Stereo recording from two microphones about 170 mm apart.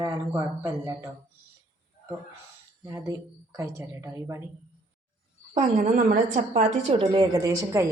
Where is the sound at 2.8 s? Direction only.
20° right (ahead or behind).